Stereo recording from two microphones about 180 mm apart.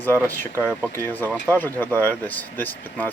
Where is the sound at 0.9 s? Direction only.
10° left (ahead or behind).